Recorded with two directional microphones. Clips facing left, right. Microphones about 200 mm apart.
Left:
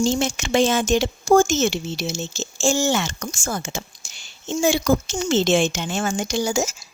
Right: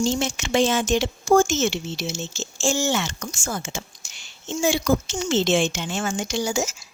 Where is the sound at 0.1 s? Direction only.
45° left (ahead or behind).